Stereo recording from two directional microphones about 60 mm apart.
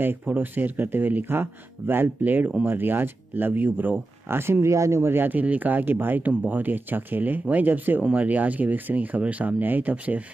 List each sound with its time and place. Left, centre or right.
0.2 s speech: right
4.3 s speech: right